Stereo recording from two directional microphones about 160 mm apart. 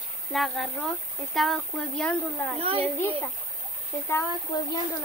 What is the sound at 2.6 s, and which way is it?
Speech, 35° right (ahead or behind).